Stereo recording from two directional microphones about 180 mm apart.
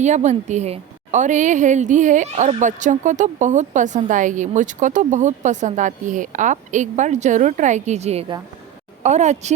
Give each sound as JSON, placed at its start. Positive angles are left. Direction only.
{"t": 0.0, "sound": "a woman's voice", "side_deg": -40}